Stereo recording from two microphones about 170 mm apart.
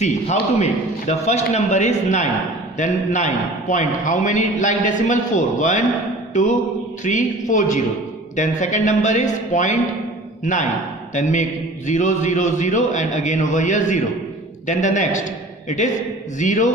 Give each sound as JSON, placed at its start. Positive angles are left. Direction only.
{"t": 0.0, "sound": "a man's voice", "side_deg": 40}
{"t": 7.0, "sound": "a man's voice", "side_deg": 45}
{"t": 16.4, "sound": "a man's voice", "side_deg": 45}